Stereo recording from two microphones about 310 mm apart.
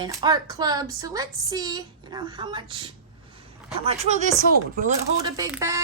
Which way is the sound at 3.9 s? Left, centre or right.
Right.